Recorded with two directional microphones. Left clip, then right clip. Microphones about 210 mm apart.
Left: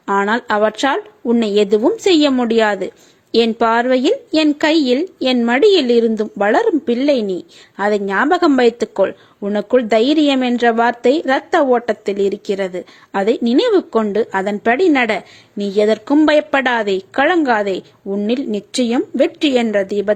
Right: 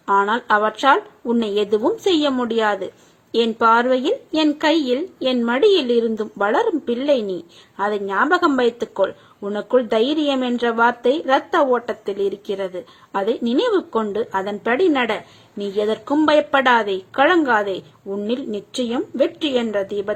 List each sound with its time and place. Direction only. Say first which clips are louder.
0.0 s a woman's voice: left 1 dB; 30° left (ahead or behind)